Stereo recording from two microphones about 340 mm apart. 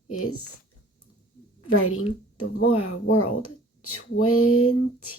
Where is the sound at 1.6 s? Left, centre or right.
Left.